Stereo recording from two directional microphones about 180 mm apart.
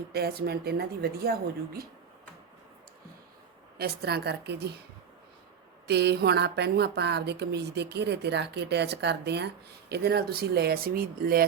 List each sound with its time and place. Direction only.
0.1 s a woman's voice: 60° right (ahead or behind)
3.8 s a woman's voice: 60° right (ahead or behind)
5.9 s a woman's voice: 70° right (ahead or behind)